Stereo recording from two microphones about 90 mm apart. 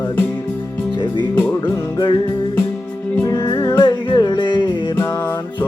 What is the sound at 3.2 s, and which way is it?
Music, 45° left (ahead or behind).